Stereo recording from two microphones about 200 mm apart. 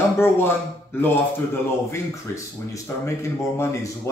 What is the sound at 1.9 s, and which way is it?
A man's voice, 15° left (ahead or behind).